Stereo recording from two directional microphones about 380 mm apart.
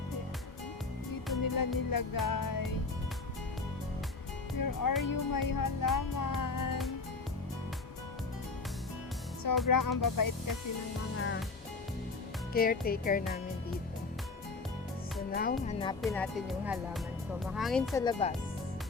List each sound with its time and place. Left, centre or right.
1.4 s music: left
4.5 s music: left
9.6 s music: left
12.5 s speech: left
15.3 s speech: left
16.0 s speech: centre